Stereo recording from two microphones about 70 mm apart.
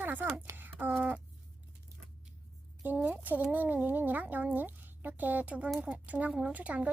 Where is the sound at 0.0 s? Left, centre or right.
Right.